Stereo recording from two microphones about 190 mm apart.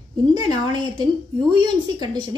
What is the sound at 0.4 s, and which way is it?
A woman's voice, 20° right (ahead or behind).